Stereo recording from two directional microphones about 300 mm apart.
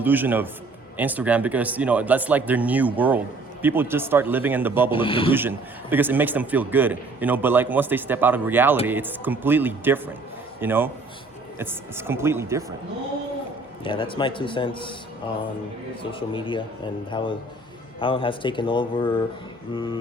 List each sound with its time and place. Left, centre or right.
0.0 s a man's voice: centre
4.9 s speech: centre
5.3 s a man's voice: centre
13.8 s speech: centre
16.3 s speech: centre